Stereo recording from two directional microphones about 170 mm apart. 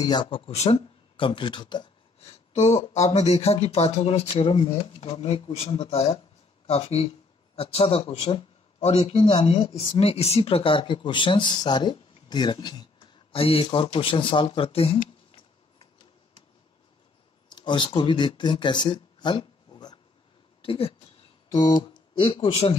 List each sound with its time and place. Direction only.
0.0 s speech: 25° left (ahead or behind)
2.2 s speech: 40° left (ahead or behind)
17.5 s speech: 25° left (ahead or behind)
21.5 s a sound: 25° left (ahead or behind)
22.2 s speech: 30° left (ahead or behind)